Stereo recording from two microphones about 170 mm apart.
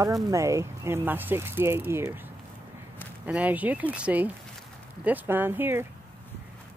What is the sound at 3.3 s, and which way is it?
Speech, 10° right (ahead or behind).